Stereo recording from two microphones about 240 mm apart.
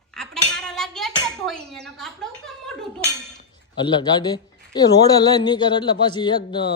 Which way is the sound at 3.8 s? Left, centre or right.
Centre.